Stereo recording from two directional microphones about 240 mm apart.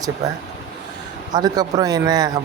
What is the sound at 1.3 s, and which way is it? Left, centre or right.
Speech, centre.